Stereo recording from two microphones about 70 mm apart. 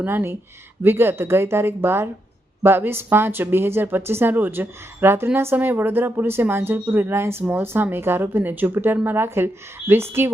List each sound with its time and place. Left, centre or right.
0.0 s speech: right